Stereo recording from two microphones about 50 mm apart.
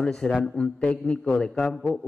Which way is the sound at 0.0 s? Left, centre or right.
Centre.